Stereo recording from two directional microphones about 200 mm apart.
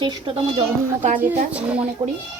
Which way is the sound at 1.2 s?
10° right (ahead or behind).